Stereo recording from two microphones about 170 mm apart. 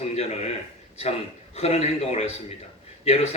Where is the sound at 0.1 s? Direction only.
40° left (ahead or behind).